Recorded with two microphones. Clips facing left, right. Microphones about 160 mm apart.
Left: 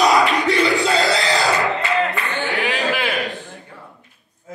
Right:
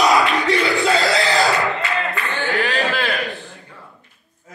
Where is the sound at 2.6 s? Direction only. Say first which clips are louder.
Even; 15° left (ahead or behind).